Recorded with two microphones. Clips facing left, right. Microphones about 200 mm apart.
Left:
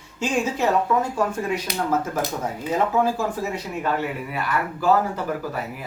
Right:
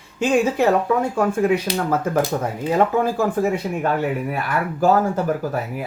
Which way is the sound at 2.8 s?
55° right (ahead or behind).